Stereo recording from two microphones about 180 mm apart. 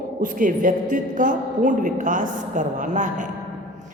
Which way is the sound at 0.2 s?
50° right (ahead or behind).